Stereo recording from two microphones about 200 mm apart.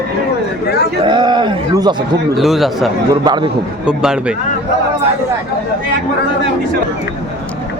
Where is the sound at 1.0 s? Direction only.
25° right (ahead or behind).